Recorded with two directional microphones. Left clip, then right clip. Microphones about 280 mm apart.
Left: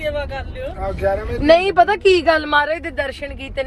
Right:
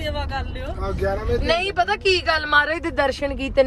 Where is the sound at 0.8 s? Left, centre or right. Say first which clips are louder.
Left 5 dB; centre.